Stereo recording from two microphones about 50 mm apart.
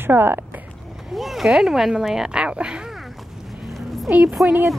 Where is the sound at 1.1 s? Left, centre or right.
Centre.